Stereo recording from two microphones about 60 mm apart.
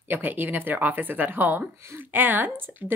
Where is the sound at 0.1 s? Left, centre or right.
Right.